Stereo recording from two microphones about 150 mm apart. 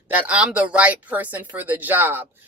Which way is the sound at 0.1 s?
10° right (ahead or behind).